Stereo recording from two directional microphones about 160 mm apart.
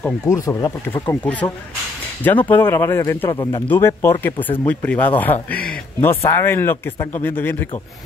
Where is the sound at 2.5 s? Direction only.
15° left (ahead or behind).